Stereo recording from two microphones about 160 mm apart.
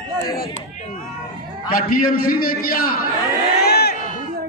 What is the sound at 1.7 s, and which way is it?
A man's voice, 60° left (ahead or behind).